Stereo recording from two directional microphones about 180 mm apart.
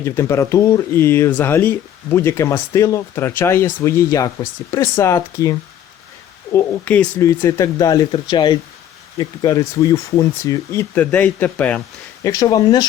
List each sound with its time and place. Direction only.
0.0 s speech: 15° left (ahead or behind)
12.2 s speech: 20° left (ahead or behind)